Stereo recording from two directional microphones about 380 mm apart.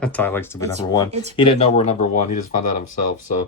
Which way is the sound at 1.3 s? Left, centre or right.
Centre.